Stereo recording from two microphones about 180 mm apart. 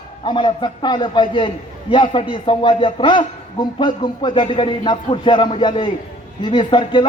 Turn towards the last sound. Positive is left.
turn(degrees=25)  # may be behind; listen again after turning